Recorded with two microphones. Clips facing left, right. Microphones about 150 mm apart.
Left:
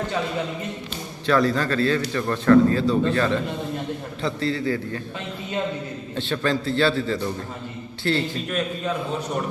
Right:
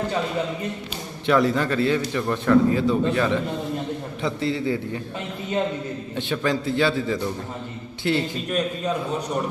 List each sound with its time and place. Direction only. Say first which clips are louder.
1.3 s a man's voice: right 1 dB; 15° right (ahead or behind)
6.1 s a man's voice: left 1 dB; 15° right (ahead or behind)